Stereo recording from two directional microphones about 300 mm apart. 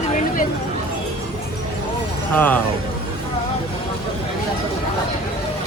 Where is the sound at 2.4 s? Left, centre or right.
Centre.